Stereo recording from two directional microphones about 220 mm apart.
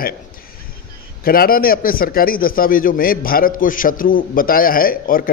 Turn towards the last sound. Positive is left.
turn(degrees=40)  # may be behind; listen again after turning